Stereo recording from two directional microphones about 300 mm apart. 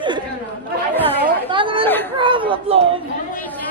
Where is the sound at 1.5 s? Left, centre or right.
Centre.